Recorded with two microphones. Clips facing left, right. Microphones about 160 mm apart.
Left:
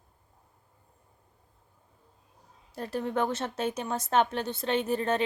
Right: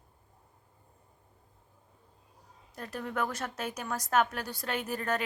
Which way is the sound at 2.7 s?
30° left (ahead or behind).